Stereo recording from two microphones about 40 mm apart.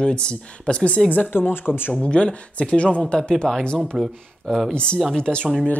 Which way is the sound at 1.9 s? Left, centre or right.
Left.